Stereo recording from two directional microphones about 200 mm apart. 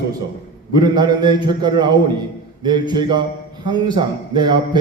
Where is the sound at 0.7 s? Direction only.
20° right (ahead or behind).